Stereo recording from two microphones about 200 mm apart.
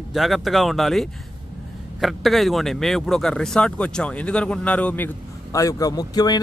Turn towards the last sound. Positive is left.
turn(degrees=20)  # may be behind; listen again after turning